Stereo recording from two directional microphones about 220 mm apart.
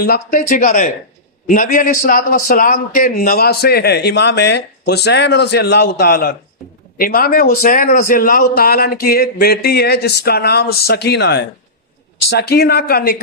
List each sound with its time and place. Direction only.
0.0 s a man's voice: 40° left (ahead or behind)